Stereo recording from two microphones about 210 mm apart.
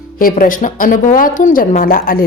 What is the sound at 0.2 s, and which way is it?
Speech, 40° left (ahead or behind).